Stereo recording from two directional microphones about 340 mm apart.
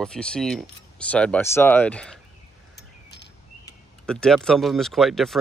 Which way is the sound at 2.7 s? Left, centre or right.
Left.